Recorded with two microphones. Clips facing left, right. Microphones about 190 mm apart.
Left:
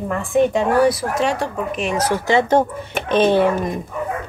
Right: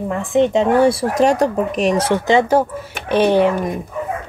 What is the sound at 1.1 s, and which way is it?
Speech, 40° right (ahead or behind).